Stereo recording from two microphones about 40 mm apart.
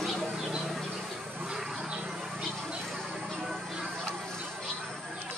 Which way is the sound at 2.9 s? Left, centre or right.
Centre.